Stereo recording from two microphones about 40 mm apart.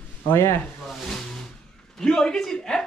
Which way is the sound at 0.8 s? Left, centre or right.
Centre.